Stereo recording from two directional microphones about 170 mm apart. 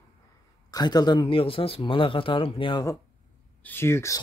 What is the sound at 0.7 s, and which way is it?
Speech, 25° left (ahead or behind).